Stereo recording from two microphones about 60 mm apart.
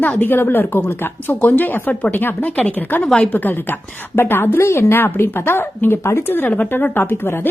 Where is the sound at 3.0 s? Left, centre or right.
Centre.